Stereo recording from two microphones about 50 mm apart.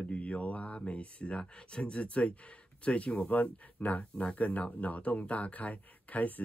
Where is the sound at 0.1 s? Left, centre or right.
Left.